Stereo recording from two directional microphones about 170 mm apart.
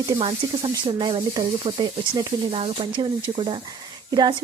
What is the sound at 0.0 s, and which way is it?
Speech, 25° right (ahead or behind).